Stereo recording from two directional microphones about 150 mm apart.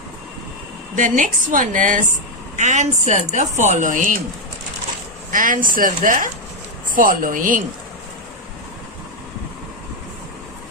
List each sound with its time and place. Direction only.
0.9 s a woman's voice: 60° right (ahead or behind)
5.3 s a woman's voice: 65° right (ahead or behind)